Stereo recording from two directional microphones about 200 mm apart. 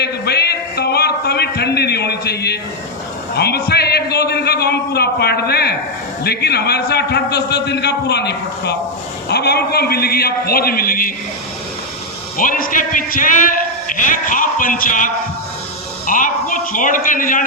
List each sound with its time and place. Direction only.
0.0 s music: 55° left (ahead or behind)
3.3 s a sound: 55° left (ahead or behind)
6.2 s a man's voice: 55° left (ahead or behind)
12.4 s a man's voice: 45° left (ahead or behind)